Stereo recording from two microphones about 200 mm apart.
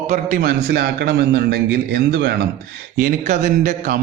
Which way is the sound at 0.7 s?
55° right (ahead or behind).